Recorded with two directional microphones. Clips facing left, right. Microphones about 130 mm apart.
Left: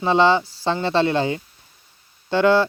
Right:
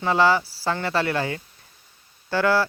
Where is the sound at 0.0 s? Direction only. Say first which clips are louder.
Left 3 dB; 25° left (ahead or behind).